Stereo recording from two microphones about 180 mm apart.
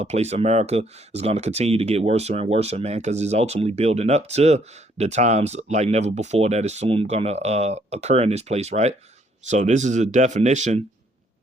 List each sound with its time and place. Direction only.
0.0 s speech: 35° right (ahead or behind)